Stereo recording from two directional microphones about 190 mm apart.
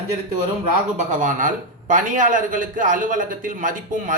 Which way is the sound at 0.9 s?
45° right (ahead or behind).